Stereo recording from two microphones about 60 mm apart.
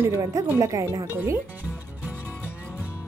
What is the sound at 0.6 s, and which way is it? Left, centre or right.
Speech, right.